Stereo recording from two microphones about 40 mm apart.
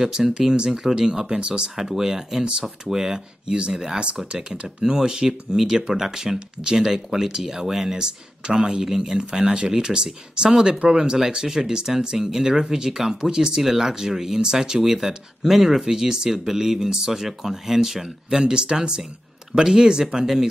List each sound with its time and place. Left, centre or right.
0.0 s speech: centre
1.8 s speech: centre
11.1 s speech: centre